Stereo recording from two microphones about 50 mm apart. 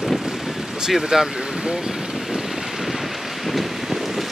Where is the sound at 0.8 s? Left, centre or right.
Centre.